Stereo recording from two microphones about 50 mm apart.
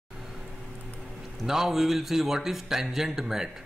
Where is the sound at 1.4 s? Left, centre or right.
Centre.